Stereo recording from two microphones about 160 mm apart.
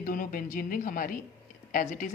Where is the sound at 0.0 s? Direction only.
60° left (ahead or behind).